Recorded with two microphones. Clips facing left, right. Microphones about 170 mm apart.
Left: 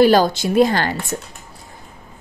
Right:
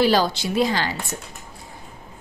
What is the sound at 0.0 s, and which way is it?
Speech, 50° left (ahead or behind).